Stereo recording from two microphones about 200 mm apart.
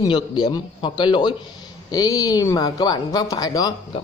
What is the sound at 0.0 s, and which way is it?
A man's voice, 20° left (ahead or behind).